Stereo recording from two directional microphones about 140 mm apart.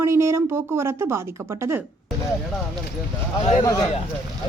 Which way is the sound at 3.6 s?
30° left (ahead or behind).